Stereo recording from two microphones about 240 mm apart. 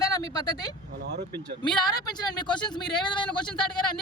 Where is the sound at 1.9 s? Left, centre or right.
Centre.